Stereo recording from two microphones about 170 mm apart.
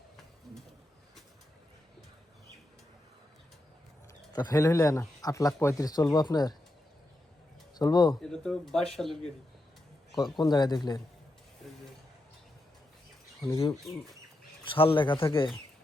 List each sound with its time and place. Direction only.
4.3 s speech: 25° left (ahead or behind)
7.8 s speech: 25° left (ahead or behind)
8.2 s speech: 5° left (ahead or behind)
10.3 s speech: 25° left (ahead or behind)
13.5 s speech: 35° left (ahead or behind)